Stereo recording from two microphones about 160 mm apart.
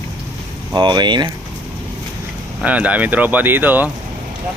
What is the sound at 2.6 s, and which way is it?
Speech, 5° right (ahead or behind).